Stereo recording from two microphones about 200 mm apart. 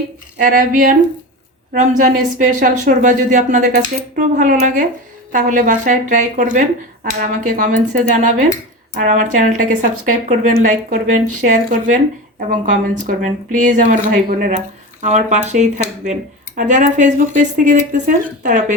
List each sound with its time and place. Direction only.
0.3 s speech: 45° right (ahead or behind)